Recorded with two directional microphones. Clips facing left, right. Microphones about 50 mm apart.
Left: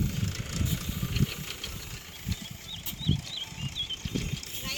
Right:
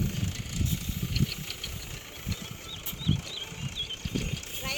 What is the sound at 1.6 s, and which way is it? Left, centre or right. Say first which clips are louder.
Vehicle: even; centre.